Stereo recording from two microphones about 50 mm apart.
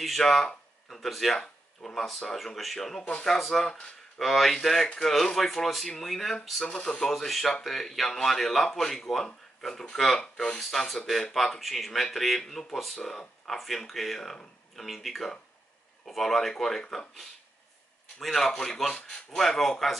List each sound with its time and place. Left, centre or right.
0.0 s speech: centre
3.0 s speech: left
3.3 s speech: centre
6.6 s speech: centre
10.2 s speech: centre
11.3 s speech: centre